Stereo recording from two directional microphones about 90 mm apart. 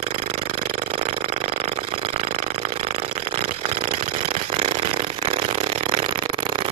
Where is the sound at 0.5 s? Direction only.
90° right.